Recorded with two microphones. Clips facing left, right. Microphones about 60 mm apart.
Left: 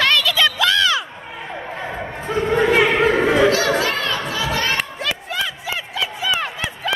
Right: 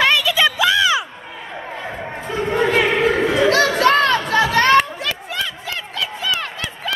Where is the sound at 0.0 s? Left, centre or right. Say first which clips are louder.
Right 1 dB; centre.